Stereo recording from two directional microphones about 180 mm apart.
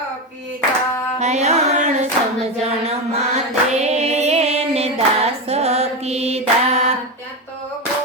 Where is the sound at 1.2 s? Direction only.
40° right (ahead or behind).